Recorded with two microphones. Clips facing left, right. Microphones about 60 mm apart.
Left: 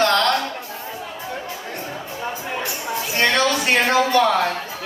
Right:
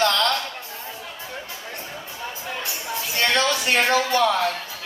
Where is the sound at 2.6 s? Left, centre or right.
Left.